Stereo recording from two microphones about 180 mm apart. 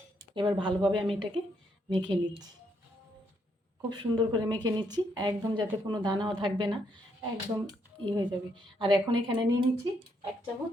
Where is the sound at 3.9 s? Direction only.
25° right (ahead or behind).